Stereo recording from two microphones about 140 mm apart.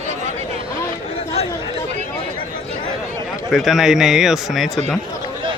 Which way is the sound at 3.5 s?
Centre (ahead or behind).